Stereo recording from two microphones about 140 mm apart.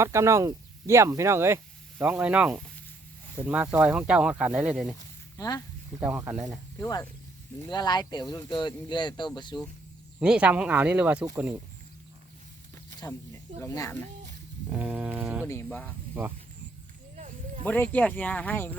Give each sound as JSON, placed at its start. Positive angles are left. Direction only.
{"t": 0.0, "sound": "speech", "side_deg": -20}
{"t": 5.4, "sound": "speech", "side_deg": 25}
{"t": 6.0, "sound": "speech", "side_deg": -10}
{"t": 6.7, "sound": "speech", "side_deg": 20}
{"t": 7.7, "sound": "speech", "side_deg": 30}
{"t": 10.2, "sound": "speech", "side_deg": -5}
{"t": 13.0, "sound": "speech", "side_deg": 25}
{"t": 14.8, "sound": "speech", "side_deg": -10}
{"t": 15.4, "sound": "speech", "side_deg": 15}
{"t": 17.6, "sound": "speech", "side_deg": 10}